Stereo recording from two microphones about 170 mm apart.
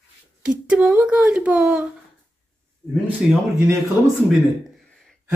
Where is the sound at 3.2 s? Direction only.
Centre (ahead or behind).